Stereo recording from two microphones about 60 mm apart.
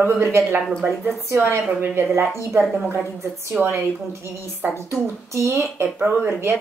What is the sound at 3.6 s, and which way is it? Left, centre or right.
A woman's voice, right.